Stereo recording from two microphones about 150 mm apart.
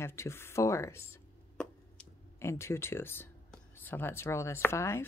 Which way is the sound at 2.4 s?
15° left (ahead or behind).